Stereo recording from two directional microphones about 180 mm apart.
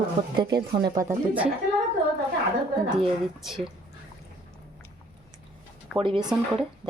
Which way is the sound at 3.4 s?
Centre (ahead or behind).